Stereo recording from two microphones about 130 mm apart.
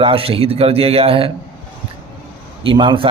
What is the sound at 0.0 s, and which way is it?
Speech, 45° right (ahead or behind).